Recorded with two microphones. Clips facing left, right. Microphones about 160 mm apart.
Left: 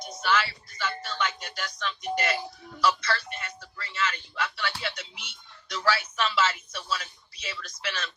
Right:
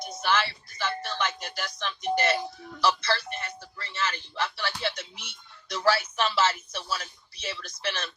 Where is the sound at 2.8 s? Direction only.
30° right (ahead or behind).